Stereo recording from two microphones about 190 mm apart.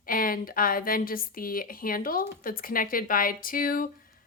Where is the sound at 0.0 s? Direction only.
50° left (ahead or behind).